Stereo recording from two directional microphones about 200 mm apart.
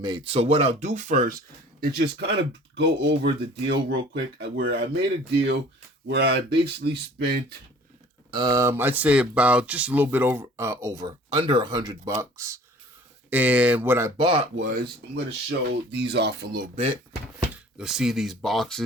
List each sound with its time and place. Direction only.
0.0 s speech: 25° right (ahead or behind)
1.8 s speech: 55° right (ahead or behind)
6.1 s speech: 55° right (ahead or behind)
8.3 s speech: 20° right (ahead or behind)
14.2 s speech: 25° right (ahead or behind)
14.6 s speech: 50° right (ahead or behind)
15.4 s speech: 60° right (ahead or behind)
16.7 s speech: 30° right (ahead or behind)
17.5 s speech: 5° right (ahead or behind)